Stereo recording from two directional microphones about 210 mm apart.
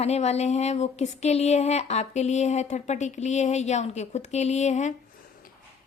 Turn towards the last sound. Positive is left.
turn(degrees=35)  # may be behind; listen again after turning